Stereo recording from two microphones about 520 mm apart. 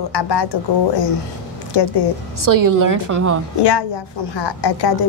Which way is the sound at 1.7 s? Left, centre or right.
Left.